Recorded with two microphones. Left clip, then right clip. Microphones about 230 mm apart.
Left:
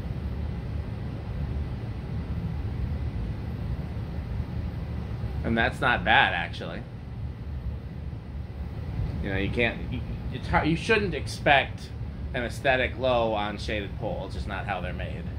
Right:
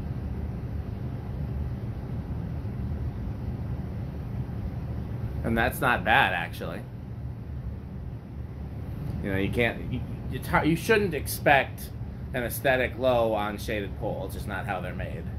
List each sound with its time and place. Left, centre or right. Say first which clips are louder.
5.4 s speech: even; centre
9.2 s speech: even; centre